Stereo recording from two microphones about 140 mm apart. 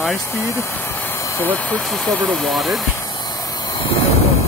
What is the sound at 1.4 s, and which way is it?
Speech, 10° left (ahead or behind).